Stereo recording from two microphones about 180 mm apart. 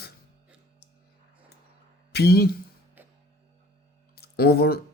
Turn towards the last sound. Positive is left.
turn(degrees=60)  # may be behind; listen again after turning